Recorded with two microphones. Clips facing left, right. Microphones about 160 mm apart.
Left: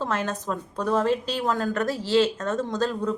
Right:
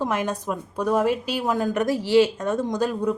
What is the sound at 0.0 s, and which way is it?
A woman's voice, 15° right (ahead or behind).